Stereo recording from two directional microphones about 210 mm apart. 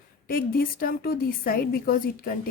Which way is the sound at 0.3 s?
45° left (ahead or behind).